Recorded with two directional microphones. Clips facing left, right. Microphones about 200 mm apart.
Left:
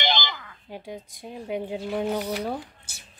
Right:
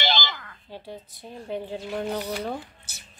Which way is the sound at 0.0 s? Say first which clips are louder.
Even; 15° left (ahead or behind).